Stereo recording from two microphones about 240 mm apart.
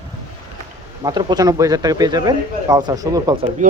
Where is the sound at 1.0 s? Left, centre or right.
Centre.